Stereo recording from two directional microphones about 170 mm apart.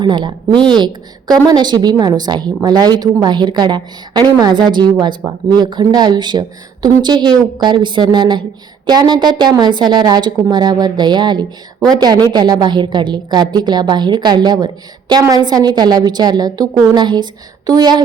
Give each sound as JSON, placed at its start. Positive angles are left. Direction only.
{"t": 0.0, "sound": "a woman's voice", "side_deg": -30}